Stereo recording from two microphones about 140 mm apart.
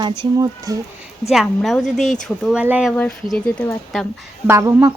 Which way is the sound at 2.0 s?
55° left (ahead or behind).